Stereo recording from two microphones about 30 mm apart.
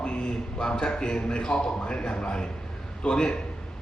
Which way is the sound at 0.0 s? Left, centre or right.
Left.